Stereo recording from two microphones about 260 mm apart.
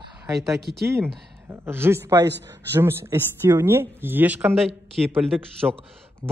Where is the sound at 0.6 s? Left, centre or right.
Right.